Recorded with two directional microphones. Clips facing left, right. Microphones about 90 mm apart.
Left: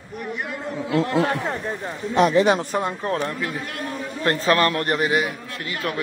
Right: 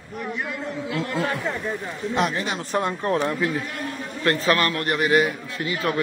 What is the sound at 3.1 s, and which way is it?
Speech, 5° right (ahead or behind).